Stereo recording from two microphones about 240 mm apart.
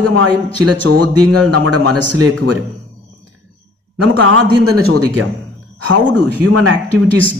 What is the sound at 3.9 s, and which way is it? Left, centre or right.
Speech, right.